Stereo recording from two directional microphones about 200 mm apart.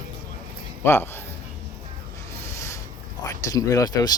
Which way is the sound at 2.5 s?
15° left (ahead or behind).